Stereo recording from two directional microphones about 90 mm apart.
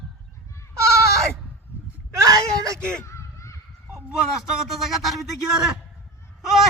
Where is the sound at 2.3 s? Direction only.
40° right (ahead or behind).